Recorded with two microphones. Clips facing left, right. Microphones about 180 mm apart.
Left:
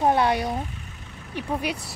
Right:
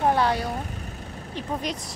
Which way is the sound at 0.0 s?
15° left (ahead or behind).